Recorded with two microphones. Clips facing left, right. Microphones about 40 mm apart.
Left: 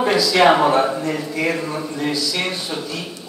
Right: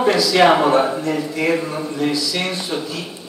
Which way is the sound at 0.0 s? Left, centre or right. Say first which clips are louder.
Right 1 dB; centre.